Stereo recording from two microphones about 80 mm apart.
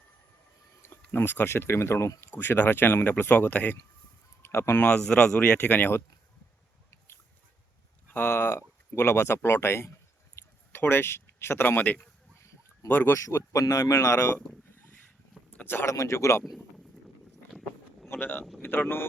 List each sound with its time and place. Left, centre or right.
0.8 s speech: left
4.4 s speech: left
4.9 s speech: centre
5.5 s speech: left
8.1 s speech: left
12.4 s a sound: left
12.9 s speech: left
13.1 s speech: left
15.5 s speech: left
16.4 s speech: centre
18.0 s vehicle: left
18.6 s speech: left